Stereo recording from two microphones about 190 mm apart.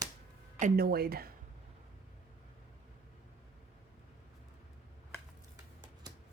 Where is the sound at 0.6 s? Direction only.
55° right (ahead or behind).